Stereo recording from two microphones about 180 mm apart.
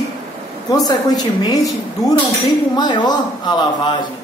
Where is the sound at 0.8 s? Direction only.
20° left (ahead or behind).